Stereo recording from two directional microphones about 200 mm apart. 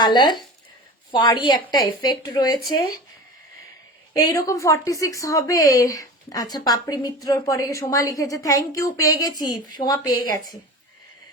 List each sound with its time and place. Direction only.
0.0 s a woman's voice: 20° left (ahead or behind)
4.2 s a woman's voice: 15° left (ahead or behind)